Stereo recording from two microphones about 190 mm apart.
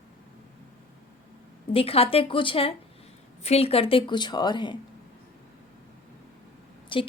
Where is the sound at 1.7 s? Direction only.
30° left (ahead or behind).